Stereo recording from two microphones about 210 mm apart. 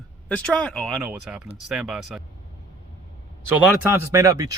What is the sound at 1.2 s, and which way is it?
Speech, 5° right (ahead or behind).